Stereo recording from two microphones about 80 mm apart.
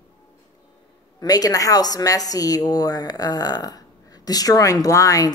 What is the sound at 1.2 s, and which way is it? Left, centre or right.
A woman's voice, left.